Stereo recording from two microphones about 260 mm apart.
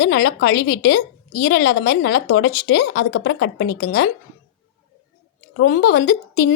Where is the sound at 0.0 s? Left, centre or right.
Left.